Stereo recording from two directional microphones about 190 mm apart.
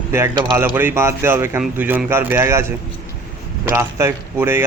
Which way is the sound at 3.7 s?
15° right (ahead or behind).